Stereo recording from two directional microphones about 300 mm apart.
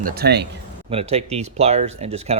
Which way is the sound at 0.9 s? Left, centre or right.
Centre.